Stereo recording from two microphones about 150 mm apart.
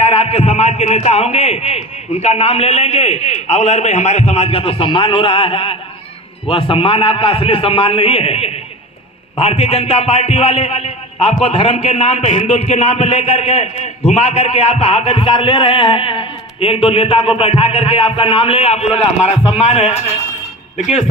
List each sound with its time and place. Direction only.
0.0 s a man's voice: 40° left (ahead or behind)